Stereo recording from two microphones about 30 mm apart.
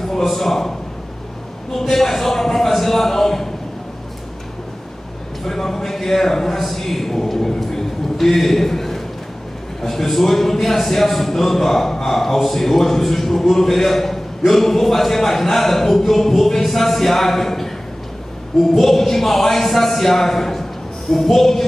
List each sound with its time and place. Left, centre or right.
0.0 s a man's voice: centre
5.4 s a man's voice: centre
18.8 s a man's voice: centre